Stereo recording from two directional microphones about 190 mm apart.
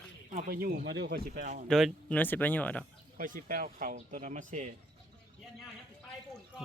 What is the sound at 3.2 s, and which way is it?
Speech, 45° right (ahead or behind).